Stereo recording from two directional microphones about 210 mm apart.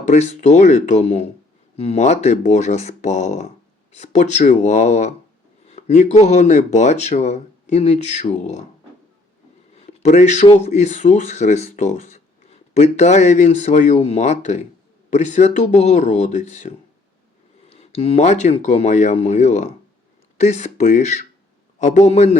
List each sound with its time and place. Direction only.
0.0 s speech: 35° left (ahead or behind)
9.7 s speech: 30° left (ahead or behind)